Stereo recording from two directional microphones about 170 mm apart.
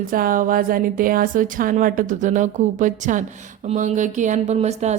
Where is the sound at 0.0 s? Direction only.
55° right (ahead or behind).